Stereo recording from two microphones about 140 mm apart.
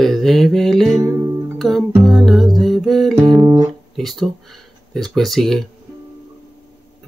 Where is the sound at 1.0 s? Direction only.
20° right (ahead or behind).